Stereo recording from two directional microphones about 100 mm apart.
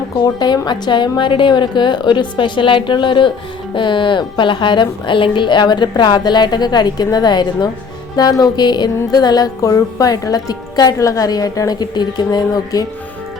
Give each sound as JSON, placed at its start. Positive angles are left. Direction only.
{"t": 0.3, "sound": "a woman's voice", "side_deg": 45}